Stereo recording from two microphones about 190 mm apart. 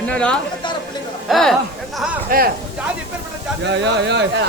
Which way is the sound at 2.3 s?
50° right (ahead or behind).